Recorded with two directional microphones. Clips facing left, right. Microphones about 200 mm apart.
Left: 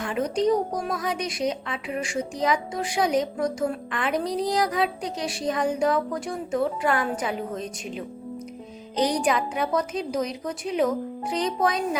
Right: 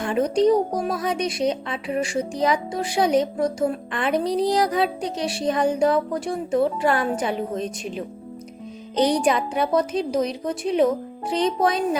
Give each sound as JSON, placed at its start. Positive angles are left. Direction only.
{"t": 0.0, "sound": "a woman's voice", "side_deg": -30}